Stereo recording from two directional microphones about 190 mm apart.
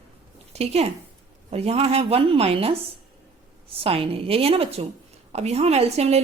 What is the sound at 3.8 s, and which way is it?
Speech, 30° right (ahead or behind).